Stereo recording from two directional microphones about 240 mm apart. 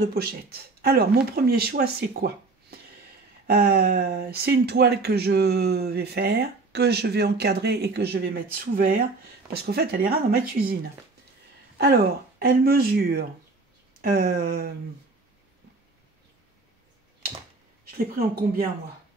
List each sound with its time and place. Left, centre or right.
0.0 s speech: right
17.9 s speech: right